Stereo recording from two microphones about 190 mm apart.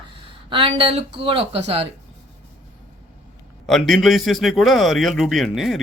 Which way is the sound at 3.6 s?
Centre (ahead or behind).